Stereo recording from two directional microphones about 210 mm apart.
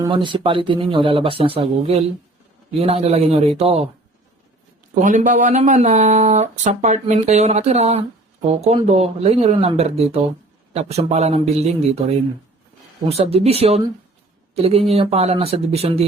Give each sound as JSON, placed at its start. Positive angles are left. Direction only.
{"t": 0.0, "sound": "speech", "side_deg": -20}
{"t": 4.9, "sound": "speech", "side_deg": -35}
{"t": 13.1, "sound": "speech", "side_deg": -30}